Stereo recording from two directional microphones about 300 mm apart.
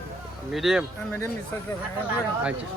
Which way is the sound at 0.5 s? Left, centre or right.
Centre.